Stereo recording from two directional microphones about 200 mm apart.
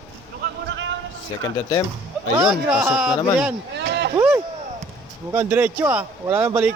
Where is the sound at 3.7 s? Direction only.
60° right (ahead or behind).